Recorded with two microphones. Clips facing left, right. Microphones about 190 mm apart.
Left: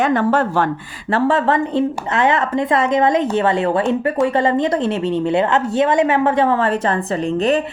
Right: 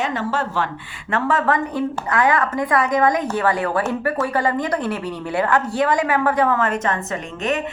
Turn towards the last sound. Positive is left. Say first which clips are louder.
# left 7 dB
turn(degrees=35)  # may be behind; listen again after turning